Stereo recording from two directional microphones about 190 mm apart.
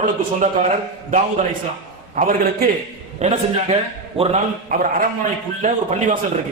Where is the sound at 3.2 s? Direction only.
35° right (ahead or behind).